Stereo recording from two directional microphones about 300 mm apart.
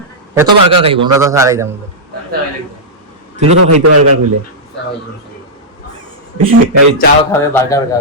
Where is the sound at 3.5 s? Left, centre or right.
Right.